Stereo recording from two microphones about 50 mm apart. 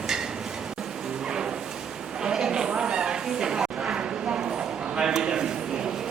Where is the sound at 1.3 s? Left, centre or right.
Centre.